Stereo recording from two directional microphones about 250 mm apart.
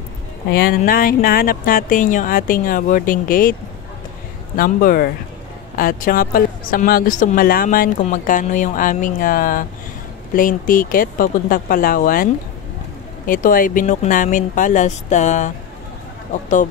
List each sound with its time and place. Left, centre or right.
0.5 s speech: left
4.6 s speech: left
13.3 s speech: left